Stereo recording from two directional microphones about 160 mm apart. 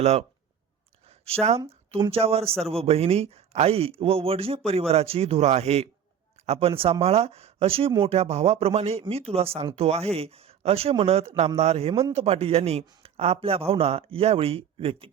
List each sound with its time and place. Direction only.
0.0 s speech: 40° right (ahead or behind)
1.0 s a sound: 40° right (ahead or behind)
1.9 s speech: 35° right (ahead or behind)